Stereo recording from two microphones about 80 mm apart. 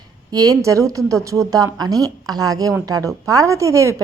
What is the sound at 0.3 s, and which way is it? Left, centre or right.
A woman's voice, right.